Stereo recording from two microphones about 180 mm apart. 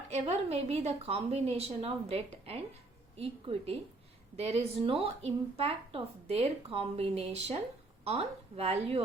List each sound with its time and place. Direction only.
0.1 s speech: 35° right (ahead or behind)